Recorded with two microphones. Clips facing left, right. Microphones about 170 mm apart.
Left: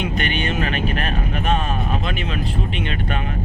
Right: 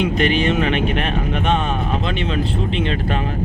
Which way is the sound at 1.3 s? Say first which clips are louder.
Right 2 dB; 90° right.